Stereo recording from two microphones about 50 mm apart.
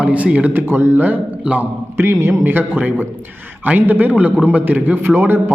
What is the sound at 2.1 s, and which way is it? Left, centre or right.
Speech, right.